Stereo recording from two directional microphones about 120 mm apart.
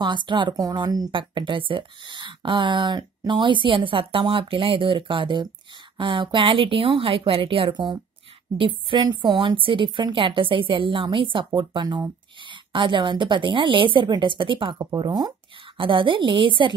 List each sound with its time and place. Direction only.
0.0 s a woman's voice: 40° right (ahead or behind)
1.1 s a woman's voice: 45° right (ahead or behind)